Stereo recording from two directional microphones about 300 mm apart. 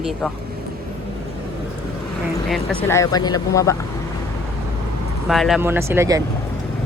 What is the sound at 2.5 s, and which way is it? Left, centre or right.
Speech, centre.